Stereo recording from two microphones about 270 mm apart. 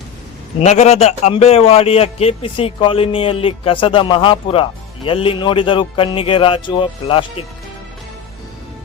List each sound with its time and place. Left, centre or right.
0.6 s a man's voice: left